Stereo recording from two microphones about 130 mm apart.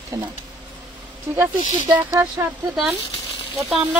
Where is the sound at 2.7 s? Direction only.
Centre (ahead or behind).